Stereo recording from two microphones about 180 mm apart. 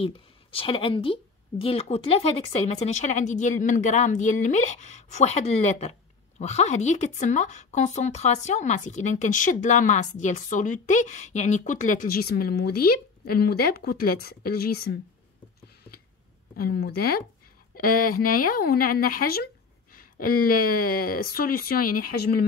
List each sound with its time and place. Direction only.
0.0 s speech: 30° left (ahead or behind); by 15.0 s 60° left (ahead or behind)
16.5 s speech: 60° left (ahead or behind)